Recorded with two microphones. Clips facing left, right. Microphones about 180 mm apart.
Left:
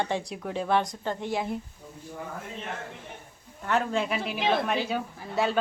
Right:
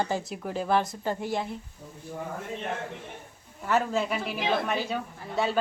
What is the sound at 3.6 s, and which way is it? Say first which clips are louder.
Speech: right 1 dB; 5° right (ahead or behind).